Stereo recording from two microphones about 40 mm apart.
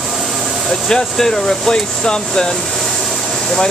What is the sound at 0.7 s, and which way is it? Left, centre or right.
Speech, centre.